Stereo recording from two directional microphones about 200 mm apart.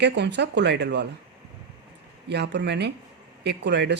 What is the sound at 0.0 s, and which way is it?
Speech, 60° right (ahead or behind).